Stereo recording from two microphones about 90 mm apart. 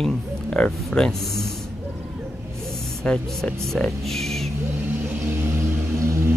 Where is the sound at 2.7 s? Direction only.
5° left (ahead or behind).